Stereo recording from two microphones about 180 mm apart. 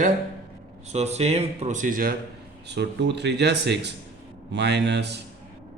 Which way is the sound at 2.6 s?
70° right (ahead or behind).